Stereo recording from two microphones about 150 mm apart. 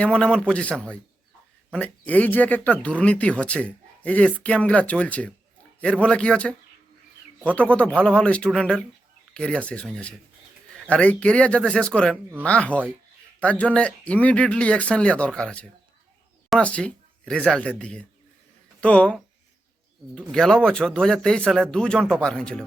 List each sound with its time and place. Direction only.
0.0 s speech: 5° left (ahead or behind)